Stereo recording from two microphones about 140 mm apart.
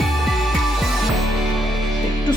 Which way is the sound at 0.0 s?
Centre (ahead or behind).